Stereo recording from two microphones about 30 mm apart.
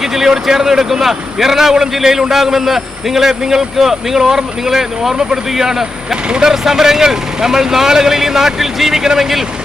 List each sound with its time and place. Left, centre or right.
0.2 s speech: centre